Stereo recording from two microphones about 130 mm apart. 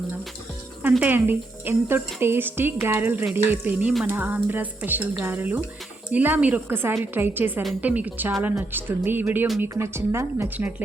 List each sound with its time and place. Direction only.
0.8 s speech: 15° right (ahead or behind)